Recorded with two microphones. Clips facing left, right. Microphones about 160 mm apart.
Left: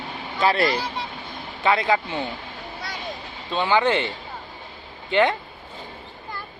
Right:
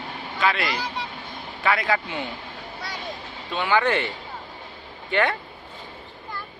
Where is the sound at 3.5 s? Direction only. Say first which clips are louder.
Left 2 dB; 25° left (ahead or behind).